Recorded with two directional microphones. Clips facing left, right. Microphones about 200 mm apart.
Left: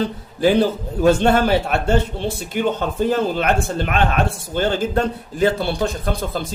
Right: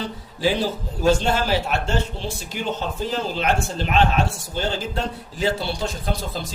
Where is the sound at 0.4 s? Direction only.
55° left (ahead or behind).